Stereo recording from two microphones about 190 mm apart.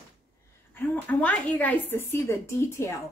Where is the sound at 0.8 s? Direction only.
10° left (ahead or behind).